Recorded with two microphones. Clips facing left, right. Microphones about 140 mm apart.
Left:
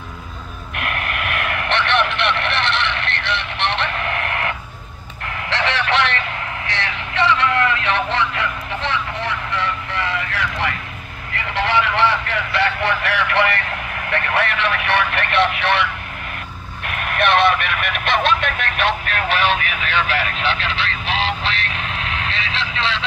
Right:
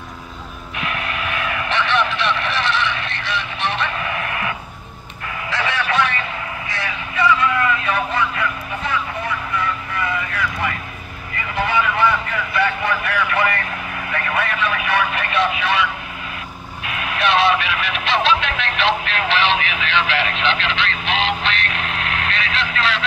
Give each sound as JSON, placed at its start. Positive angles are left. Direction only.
{"t": 0.7, "sound": "vehicle", "side_deg": 60}
{"t": 5.5, "sound": "radio", "side_deg": 80}
{"t": 6.7, "sound": "vehicle", "side_deg": 80}
{"t": 11.5, "sound": "a sound", "side_deg": 85}
{"t": 14.1, "sound": "vehicle", "side_deg": 75}
{"t": 17.2, "sound": "vehicle", "side_deg": 55}